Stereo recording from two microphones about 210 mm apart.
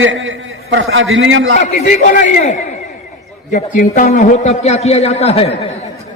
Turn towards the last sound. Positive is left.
turn(degrees=30)  # may be behind; listen again after turning